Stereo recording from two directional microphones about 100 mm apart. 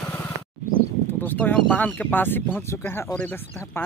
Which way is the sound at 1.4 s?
10° left (ahead or behind).